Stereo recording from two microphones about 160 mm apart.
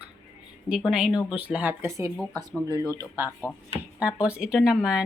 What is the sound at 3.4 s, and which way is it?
A woman's voice, 10° right (ahead or behind).